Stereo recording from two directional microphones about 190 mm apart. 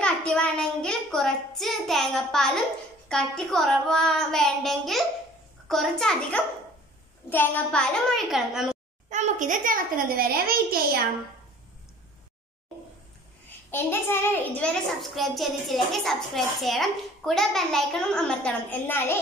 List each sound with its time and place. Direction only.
0.0 s a child's voice: 5° left (ahead or behind)
9.1 s a child's voice: 40° right (ahead or behind)
13.7 s a child's voice: 10° left (ahead or behind)